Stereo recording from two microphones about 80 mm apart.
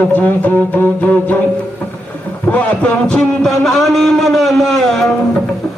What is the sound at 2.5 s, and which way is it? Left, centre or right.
A man's voice, centre.